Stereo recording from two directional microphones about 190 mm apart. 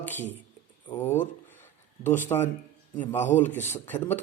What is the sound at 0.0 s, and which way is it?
Speech, 10° left (ahead or behind).